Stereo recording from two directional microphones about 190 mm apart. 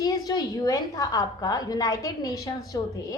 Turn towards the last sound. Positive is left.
turn(degrees=20)  # may be behind; listen again after turning